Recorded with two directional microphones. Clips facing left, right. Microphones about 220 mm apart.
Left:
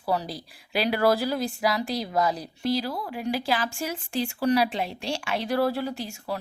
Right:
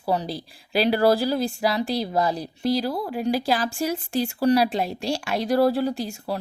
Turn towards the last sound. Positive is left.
turn(degrees=-35)  # may be behind; listen again after turning